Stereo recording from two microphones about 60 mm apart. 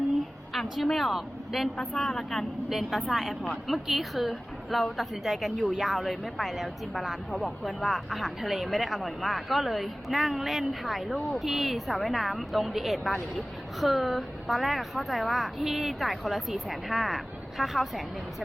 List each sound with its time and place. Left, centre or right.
0.5 s a woman's voice: centre